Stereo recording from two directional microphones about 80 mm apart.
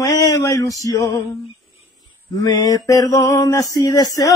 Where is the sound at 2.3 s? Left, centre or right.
Left.